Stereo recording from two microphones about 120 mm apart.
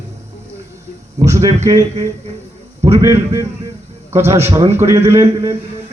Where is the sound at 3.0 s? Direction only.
25° right (ahead or behind).